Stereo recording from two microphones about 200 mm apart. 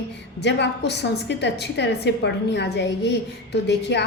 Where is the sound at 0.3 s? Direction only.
60° left (ahead or behind).